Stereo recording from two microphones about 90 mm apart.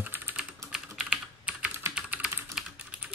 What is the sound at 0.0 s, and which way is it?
Typing, 25° right (ahead or behind).